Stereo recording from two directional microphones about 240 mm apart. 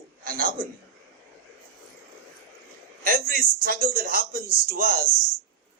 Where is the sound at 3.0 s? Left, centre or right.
Right.